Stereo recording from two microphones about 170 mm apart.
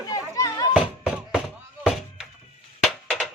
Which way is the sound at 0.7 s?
5° right (ahead or behind).